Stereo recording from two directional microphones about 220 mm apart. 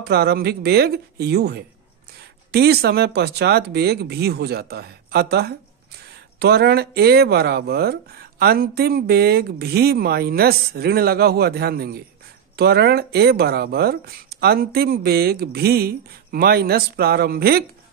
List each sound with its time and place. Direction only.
0.0 s speech: 45° right (ahead or behind)